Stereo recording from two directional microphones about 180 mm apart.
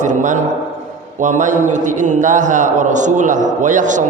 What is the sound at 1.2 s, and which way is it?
A man's voice, 45° right (ahead or behind).